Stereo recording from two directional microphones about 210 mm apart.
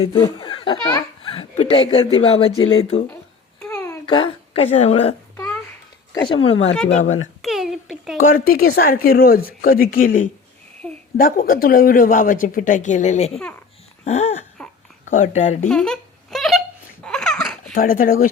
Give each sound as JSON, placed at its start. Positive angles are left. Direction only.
{"t": 0.1, "sound": "speech", "side_deg": 20}
{"t": 3.6, "sound": "babbling", "side_deg": 15}
{"t": 6.1, "sound": "a woman's voice", "side_deg": 25}
{"t": 7.4, "sound": "a sound", "side_deg": 0}
{"t": 8.4, "sound": "a woman's voice", "side_deg": 45}
{"t": 10.8, "sound": "a sound", "side_deg": 5}
{"t": 11.2, "sound": "a woman's voice", "side_deg": 40}
{"t": 14.0, "sound": "a sound", "side_deg": 30}
{"t": 14.6, "sound": "babbling", "side_deg": 5}
{"t": 15.1, "sound": "a woman's voice", "side_deg": 35}
{"t": 15.7, "sound": "baby laughter", "side_deg": 5}
{"t": 17.7, "sound": "speech", "side_deg": 40}